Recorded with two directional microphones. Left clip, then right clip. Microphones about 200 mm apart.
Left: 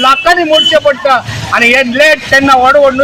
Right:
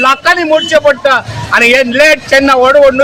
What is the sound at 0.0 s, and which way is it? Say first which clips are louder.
A man's voice: left 1 dB; 15° right (ahead or behind).